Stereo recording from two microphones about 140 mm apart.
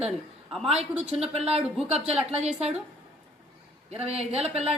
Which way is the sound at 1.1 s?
45° right (ahead or behind).